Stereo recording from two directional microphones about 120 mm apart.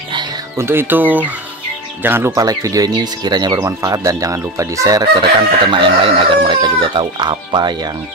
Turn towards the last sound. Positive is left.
turn(degrees=-35)  # may be behind; listen again after turning